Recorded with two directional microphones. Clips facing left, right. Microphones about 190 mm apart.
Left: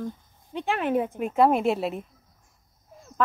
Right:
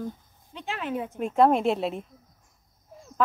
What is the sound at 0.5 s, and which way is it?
Speech, 55° left (ahead or behind).